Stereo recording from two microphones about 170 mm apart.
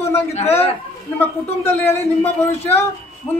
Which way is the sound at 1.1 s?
10° left (ahead or behind).